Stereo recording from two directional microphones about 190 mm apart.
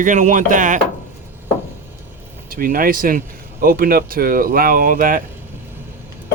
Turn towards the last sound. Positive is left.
turn(degrees=-45)  # may be behind; listen again after turning